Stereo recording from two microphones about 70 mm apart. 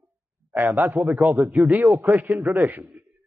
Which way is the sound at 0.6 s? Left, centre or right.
Right.